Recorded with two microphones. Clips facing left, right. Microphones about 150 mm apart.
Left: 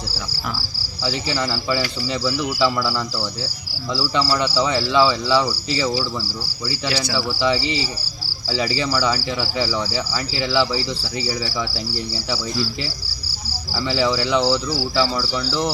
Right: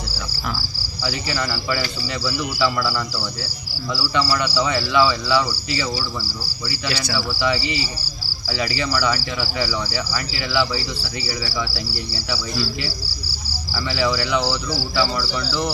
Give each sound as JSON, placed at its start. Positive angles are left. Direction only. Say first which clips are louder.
{"t": 1.0, "sound": "speech", "louder": "left 2 dB", "side_deg": 25}
{"t": 6.7, "sound": "speech", "louder": "left 2 dB", "side_deg": 25}
{"t": 13.7, "sound": "speech", "louder": "left 2 dB", "side_deg": 30}